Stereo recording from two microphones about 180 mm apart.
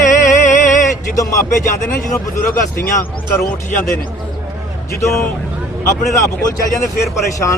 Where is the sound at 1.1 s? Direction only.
20° left (ahead or behind).